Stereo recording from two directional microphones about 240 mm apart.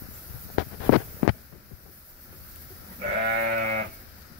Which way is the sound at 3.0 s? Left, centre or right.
Right.